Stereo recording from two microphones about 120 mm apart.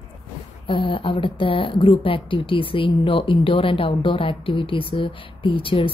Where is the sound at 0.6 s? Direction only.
45° left (ahead or behind).